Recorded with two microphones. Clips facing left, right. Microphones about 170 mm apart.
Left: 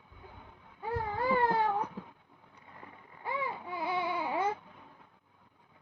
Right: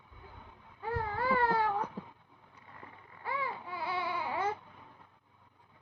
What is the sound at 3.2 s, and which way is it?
Baby cry, 20° left (ahead or behind).